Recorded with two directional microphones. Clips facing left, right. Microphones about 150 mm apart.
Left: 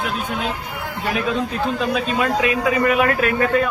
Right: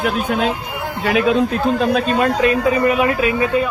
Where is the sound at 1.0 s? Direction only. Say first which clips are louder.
Right 7 dB; 75° right (ahead or behind).